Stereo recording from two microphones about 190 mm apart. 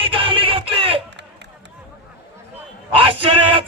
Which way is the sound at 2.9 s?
30° right (ahead or behind).